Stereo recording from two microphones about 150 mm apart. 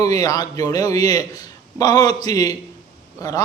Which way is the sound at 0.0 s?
25° left (ahead or behind).